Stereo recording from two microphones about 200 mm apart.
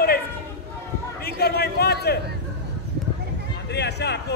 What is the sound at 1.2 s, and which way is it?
Speech, 50° left (ahead or behind).